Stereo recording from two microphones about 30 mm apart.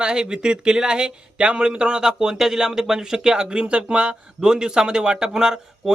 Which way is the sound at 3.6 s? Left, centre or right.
Right.